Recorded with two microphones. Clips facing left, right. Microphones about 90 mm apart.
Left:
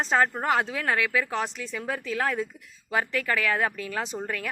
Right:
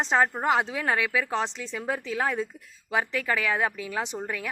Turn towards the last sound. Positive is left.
turn(degrees=-10)  # may be behind; listen again after turning